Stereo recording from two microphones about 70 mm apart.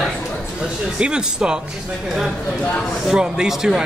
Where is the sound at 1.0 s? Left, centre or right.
Centre.